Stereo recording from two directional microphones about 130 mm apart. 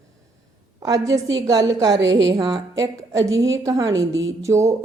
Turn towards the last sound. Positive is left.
turn(degrees=-20)  # may be behind; listen again after turning